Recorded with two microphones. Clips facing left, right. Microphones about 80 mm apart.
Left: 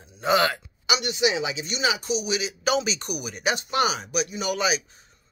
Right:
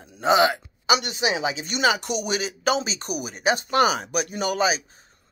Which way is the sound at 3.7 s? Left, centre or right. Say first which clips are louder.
Right 3 dB; right.